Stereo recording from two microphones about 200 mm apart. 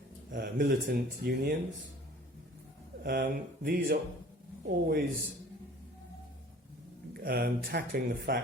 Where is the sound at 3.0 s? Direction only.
50° right (ahead or behind).